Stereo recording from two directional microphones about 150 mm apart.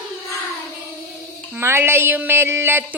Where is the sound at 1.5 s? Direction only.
15° right (ahead or behind).